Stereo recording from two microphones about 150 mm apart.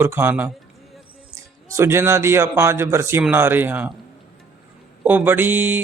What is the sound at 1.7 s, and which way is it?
Speech, 15° right (ahead or behind).